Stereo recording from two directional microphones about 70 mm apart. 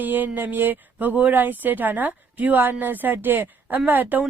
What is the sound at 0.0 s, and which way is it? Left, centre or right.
Speech, right.